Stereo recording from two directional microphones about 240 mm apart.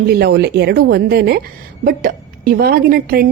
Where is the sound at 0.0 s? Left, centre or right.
Right.